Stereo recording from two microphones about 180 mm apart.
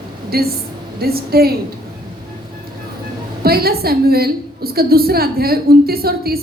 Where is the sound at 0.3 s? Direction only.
60° right (ahead or behind).